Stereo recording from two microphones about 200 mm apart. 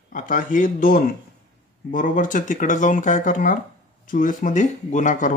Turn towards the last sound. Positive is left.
turn(degrees=40)  # may be behind; listen again after turning